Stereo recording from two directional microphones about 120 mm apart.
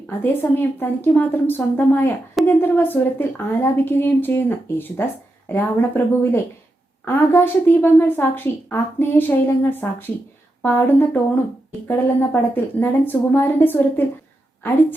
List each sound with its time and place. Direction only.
0.1 s a woman's voice: 15° left (ahead or behind)